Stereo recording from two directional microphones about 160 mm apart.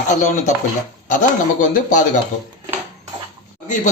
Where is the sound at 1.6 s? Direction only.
50° left (ahead or behind).